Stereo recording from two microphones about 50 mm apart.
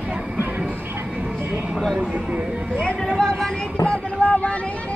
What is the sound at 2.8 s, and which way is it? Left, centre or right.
Speech, centre.